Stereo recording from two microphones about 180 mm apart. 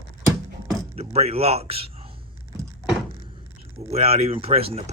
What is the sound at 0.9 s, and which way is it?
Speech, 35° right (ahead or behind).